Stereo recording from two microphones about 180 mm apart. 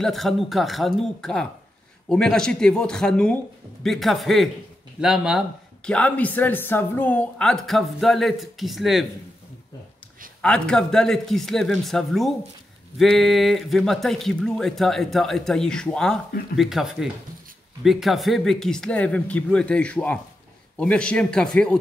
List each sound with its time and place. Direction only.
0.0 s speech: centre (ahead or behind)
5.9 s speech: 5° left (ahead or behind)
10.4 s speech: 5° left (ahead or behind)